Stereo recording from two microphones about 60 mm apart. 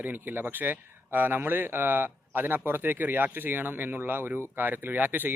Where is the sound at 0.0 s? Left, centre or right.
Right.